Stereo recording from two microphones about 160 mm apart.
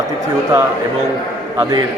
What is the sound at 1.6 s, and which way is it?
Speech, 20° right (ahead or behind).